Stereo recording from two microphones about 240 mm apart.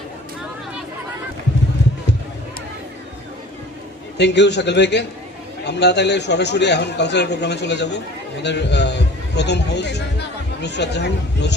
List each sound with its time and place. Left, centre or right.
4.2 s a man's voice: left